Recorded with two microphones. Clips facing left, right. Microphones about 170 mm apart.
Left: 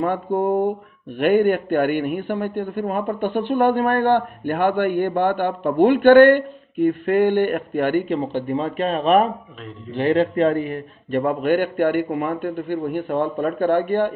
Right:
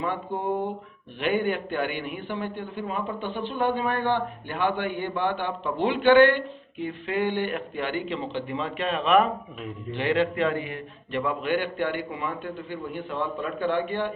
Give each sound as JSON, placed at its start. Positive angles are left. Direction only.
{"t": 0.0, "sound": "a man's voice", "side_deg": 50}